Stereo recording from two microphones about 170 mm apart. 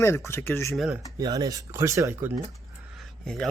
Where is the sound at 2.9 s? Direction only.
Centre (ahead or behind).